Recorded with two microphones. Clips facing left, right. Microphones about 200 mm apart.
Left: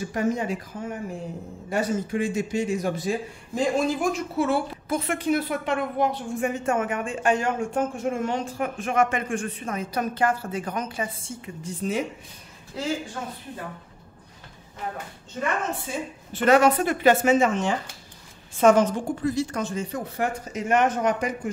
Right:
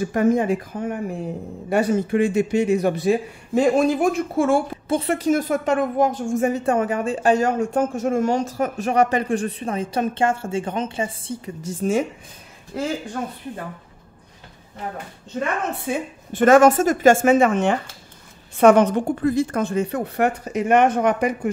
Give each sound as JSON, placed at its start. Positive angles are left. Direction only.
{"t": 0.0, "sound": "a woman's voice", "side_deg": -55}
{"t": 4.8, "sound": "a woman's voice", "side_deg": -30}
{"t": 15.7, "sound": "a woman's voice", "side_deg": -60}